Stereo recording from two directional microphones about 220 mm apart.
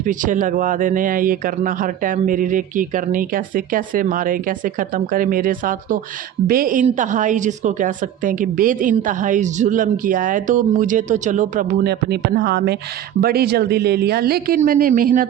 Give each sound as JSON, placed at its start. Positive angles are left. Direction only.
{"t": 0.0, "sound": "a woman's voice", "side_deg": -35}